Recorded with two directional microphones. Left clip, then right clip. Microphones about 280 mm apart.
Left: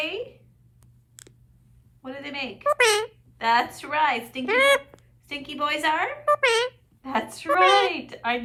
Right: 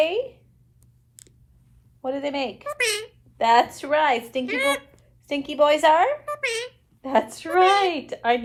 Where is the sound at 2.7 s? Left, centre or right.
Left.